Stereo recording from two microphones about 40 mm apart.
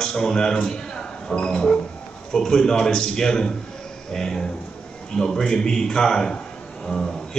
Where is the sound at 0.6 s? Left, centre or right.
Centre.